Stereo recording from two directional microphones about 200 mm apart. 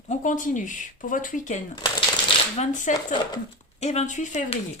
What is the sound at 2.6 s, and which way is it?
Speech, 40° left (ahead or behind).